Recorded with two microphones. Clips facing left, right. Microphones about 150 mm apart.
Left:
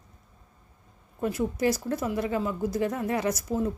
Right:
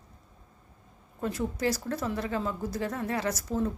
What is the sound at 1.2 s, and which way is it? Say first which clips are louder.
Speech: left 4 dB; 15° left (ahead or behind).